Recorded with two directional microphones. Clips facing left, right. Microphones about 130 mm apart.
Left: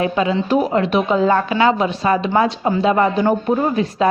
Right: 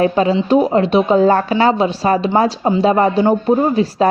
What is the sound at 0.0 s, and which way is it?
A woman's voice, 35° right (ahead or behind).